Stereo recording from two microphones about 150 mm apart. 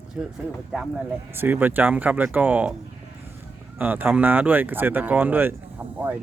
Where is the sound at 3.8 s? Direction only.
10° right (ahead or behind).